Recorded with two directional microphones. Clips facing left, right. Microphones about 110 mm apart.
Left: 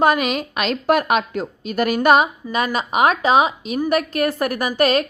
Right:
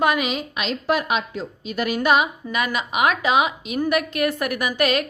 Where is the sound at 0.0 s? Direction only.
40° left (ahead or behind).